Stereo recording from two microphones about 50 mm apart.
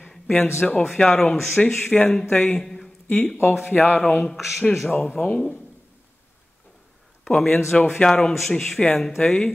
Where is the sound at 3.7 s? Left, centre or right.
Left.